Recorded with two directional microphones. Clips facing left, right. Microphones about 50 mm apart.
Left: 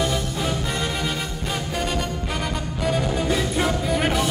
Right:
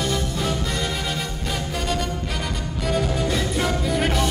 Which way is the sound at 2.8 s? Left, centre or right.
Centre.